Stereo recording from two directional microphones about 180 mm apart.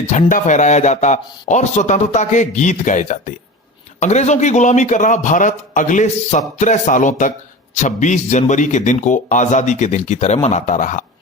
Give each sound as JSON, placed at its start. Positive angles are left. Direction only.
{"t": 0.1, "sound": "a man's voice", "side_deg": 45}